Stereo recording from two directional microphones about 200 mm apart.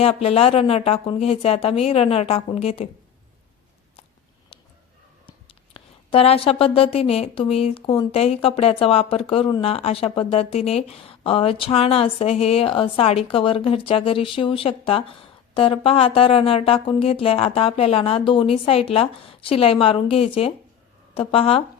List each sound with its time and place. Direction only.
0.0 s a woman's voice: 30° left (ahead or behind)
5.7 s a woman's voice: 30° left (ahead or behind)